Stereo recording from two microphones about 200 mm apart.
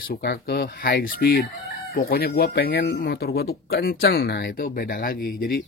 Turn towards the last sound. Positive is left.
turn(degrees=50)  # may be behind; listen again after turning